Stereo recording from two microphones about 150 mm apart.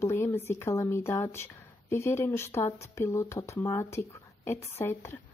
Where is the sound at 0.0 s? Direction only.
15° left (ahead or behind).